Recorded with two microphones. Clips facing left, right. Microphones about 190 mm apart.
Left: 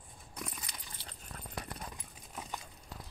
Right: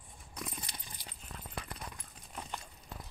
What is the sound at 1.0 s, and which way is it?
Clip-clop, 15° right (ahead or behind).